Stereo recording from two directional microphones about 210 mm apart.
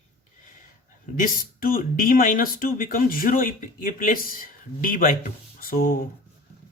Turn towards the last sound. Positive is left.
turn(degrees=45)  # may be behind; listen again after turning